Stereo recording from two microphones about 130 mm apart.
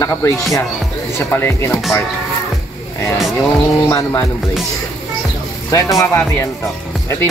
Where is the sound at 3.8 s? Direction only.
20° left (ahead or behind).